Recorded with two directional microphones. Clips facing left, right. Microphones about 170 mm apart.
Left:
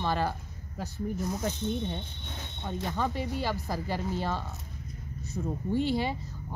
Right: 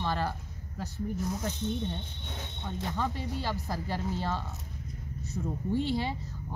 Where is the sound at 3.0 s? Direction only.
10° left (ahead or behind).